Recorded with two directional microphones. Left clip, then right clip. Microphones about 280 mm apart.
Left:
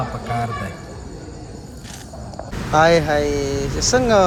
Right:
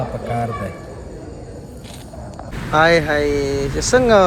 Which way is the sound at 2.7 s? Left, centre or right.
Centre.